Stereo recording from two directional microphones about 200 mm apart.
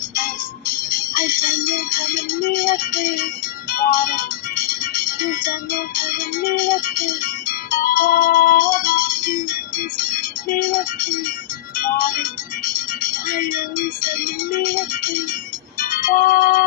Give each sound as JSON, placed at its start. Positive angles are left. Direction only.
{"t": 0.1, "sound": "music", "side_deg": 45}
{"t": 13.3, "sound": "speech", "side_deg": 45}
{"t": 15.8, "sound": "music", "side_deg": 45}